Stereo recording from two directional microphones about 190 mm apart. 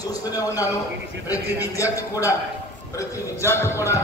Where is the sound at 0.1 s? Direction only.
20° left (ahead or behind).